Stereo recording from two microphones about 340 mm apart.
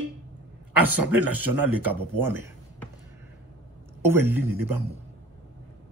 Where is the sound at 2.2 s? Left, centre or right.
Centre.